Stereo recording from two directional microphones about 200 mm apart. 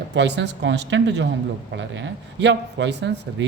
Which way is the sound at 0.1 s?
60° right (ahead or behind).